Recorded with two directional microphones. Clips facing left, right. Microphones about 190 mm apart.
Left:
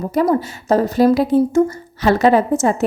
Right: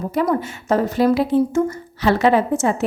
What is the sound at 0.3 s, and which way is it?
A woman's voice, 35° left (ahead or behind).